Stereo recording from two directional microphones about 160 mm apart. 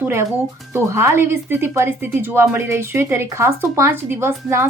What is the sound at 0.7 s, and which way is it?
A woman's voice, 15° right (ahead or behind).